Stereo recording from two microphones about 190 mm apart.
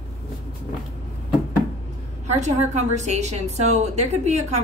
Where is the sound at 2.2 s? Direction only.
35° right (ahead or behind).